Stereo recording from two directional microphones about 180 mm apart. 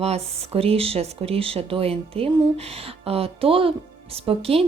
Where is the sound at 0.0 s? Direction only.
35° right (ahead or behind).